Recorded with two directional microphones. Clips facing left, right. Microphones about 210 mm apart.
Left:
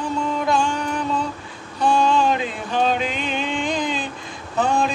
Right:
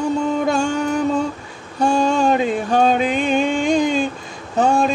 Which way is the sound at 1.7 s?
45° right (ahead or behind).